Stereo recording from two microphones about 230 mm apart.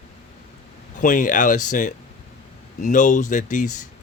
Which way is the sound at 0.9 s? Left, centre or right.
Left.